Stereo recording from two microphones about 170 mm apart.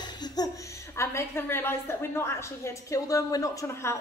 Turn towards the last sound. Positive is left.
turn(degrees=15)  # may be behind; listen again after turning